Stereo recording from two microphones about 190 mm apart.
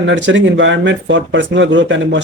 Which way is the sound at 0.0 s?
75° right (ahead or behind).